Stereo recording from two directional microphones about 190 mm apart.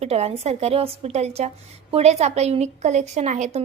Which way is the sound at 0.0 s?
35° right (ahead or behind).